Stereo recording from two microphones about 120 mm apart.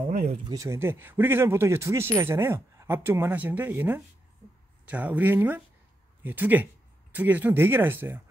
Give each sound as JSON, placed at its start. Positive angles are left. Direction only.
{"t": 0.5, "sound": "speech", "side_deg": -25}